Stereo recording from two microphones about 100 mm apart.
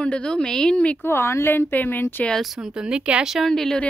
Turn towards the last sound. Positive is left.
turn(degrees=5)  # may be behind; listen again after turning